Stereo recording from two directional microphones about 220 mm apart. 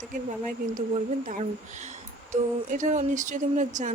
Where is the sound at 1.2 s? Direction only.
30° right (ahead or behind).